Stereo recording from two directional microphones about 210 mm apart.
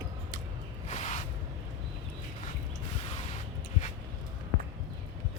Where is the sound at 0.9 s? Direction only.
35° left (ahead or behind).